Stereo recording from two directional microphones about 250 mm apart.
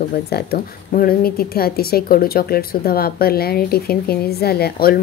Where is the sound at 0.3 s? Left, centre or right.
Left.